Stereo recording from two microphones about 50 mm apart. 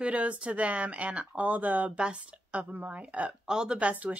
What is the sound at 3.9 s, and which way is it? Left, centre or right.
Speech, right.